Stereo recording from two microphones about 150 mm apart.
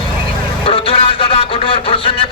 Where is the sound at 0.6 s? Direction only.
40° left (ahead or behind).